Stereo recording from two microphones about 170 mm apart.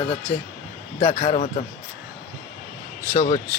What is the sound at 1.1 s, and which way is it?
Speech, 40° left (ahead or behind).